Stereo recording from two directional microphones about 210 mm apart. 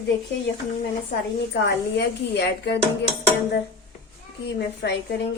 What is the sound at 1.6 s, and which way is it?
Speech, 55° left (ahead or behind).